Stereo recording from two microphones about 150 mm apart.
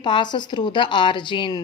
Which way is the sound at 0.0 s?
30° left (ahead or behind).